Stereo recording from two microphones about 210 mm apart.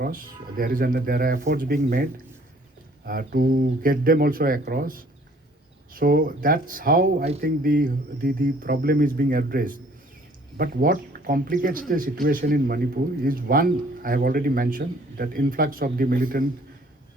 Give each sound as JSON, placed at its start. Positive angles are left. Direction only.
{"t": 0.0, "sound": "a man's voice", "side_deg": -45}
{"t": 3.1, "sound": "a man's voice", "side_deg": -45}